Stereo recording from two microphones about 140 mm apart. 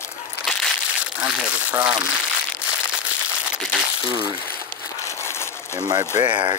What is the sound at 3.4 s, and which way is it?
Crumpling, 5° right (ahead or behind).